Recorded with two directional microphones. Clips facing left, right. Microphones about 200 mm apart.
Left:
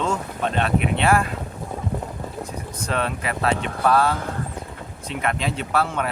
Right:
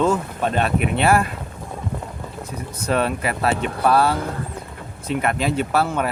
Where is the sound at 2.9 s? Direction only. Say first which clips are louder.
Right 5 dB; 5° right (ahead or behind).